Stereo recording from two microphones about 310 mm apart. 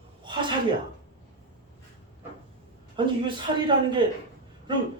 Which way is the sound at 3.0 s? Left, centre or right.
Centre.